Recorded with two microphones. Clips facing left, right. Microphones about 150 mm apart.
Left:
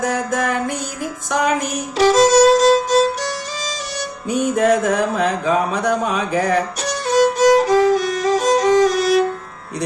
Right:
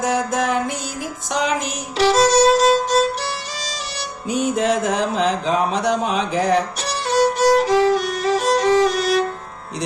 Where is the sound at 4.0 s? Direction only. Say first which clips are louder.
Left 2 dB; 50° left (ahead or behind).